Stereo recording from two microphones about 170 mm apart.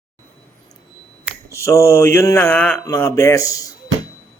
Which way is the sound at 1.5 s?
15° left (ahead or behind).